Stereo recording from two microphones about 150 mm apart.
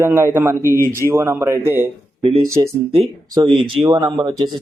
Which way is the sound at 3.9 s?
20° right (ahead or behind).